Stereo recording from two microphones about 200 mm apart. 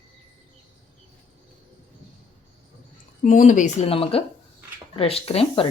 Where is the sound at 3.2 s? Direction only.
40° left (ahead or behind).